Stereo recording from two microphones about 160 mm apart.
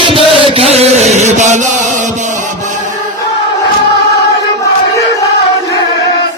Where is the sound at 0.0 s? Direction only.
35° right (ahead or behind); by 1.6 s 50° right (ahead or behind).